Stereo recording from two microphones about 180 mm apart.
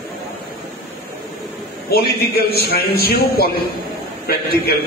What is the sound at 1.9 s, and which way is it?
A man's voice, 60° left (ahead or behind).